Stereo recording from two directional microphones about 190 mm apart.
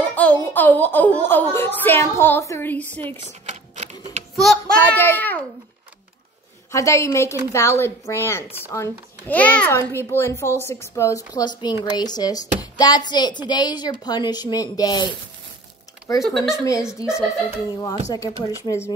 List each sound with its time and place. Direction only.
0.1 s a woman's voice: 10° left (ahead or behind)
3.3 s a sound: 35° right (ahead or behind)
4.4 s speech: centre (ahead or behind)
4.9 s a woman's voice: 10° left (ahead or behind)
6.7 s a woman's voice: 15° left (ahead or behind)
16.2 s speech: centre (ahead or behind)
17.6 s a woman's voice: 20° left (ahead or behind)